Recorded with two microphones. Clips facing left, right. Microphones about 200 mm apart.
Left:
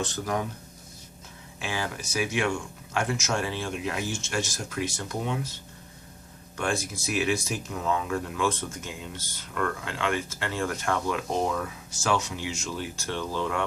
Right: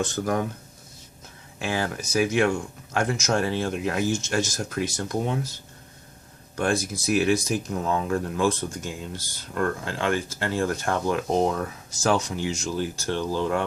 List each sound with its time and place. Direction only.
0.0 s speech: 50° right (ahead or behind)
1.6 s speech: 45° right (ahead or behind)
6.6 s speech: 35° right (ahead or behind)